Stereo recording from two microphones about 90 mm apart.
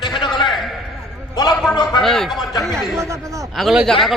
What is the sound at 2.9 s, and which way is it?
Speech, 35° right (ahead or behind).